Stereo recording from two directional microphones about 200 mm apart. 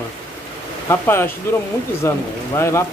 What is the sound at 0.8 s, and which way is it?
Speech, 10° left (ahead or behind).